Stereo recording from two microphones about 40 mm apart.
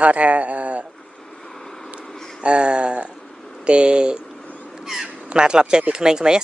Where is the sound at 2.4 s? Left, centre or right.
Right.